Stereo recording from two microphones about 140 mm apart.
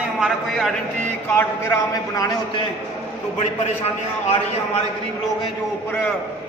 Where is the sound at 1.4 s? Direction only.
20° left (ahead or behind).